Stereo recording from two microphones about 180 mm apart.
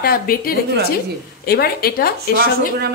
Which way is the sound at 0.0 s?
55° left (ahead or behind).